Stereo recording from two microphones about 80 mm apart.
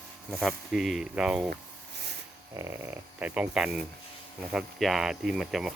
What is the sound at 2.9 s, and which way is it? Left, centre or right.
Speech, centre.